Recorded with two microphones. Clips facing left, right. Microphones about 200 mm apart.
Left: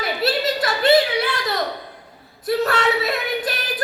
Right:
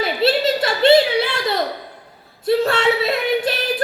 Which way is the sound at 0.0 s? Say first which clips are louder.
Right 4 dB; 25° right (ahead or behind).